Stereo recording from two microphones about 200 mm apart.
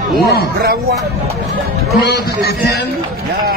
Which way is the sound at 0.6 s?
50° right (ahead or behind).